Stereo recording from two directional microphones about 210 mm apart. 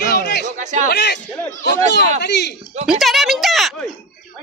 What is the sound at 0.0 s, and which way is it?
Chatter, 45° left (ahead or behind).